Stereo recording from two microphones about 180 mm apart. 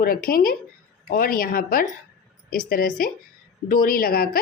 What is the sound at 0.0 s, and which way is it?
A woman's voice, 55° left (ahead or behind).